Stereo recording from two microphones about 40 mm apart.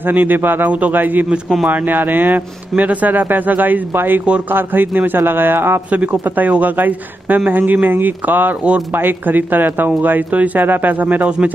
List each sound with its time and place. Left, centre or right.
0.0 s a man's voice: right
0.7 s a man's voice: right
0.9 s speech: right
3.9 s a man's voice: right
6.2 s speech: right